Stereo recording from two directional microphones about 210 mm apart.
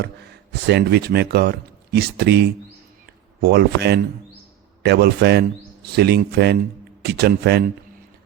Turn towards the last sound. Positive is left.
turn(degrees=-50)  # may be behind; listen again after turning